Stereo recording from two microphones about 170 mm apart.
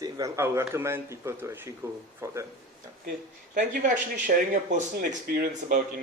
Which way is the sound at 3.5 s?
50° right (ahead or behind).